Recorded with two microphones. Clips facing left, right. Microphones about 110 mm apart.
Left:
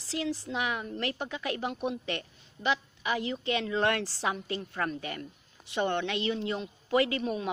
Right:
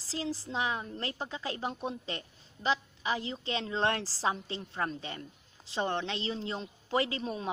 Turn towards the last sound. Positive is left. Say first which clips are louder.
# left 4 dB
turn(degrees=-30)  # may be behind; listen again after turning